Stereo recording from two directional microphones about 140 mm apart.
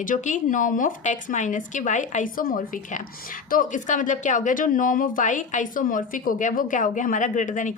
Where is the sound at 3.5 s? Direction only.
65° left (ahead or behind).